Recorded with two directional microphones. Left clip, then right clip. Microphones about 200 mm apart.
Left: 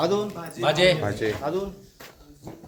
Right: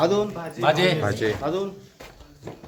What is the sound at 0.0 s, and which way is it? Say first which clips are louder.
Speech: right 3 dB; 20° right (ahead or behind).